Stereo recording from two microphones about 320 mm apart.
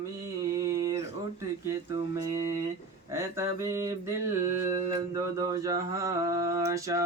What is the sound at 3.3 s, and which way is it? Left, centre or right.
Mantra, centre.